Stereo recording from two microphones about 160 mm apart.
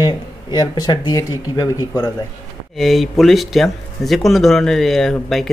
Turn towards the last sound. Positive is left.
turn(degrees=0)  # may be behind; listen again after turning